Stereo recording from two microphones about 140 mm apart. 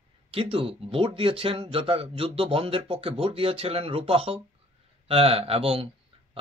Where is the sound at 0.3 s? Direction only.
45° right (ahead or behind).